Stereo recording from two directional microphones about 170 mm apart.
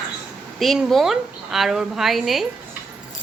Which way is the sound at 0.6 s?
Centre (ahead or behind).